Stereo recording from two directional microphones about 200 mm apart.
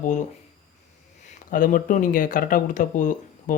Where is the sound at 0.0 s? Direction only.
40° left (ahead or behind).